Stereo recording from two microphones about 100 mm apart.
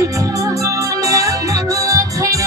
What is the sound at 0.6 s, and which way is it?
Music, 35° right (ahead or behind).